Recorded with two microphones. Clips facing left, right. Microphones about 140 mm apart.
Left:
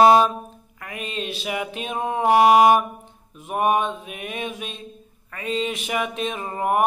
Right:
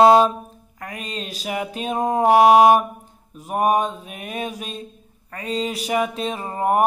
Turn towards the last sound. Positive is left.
turn(degrees=-35)  # may be behind; listen again after turning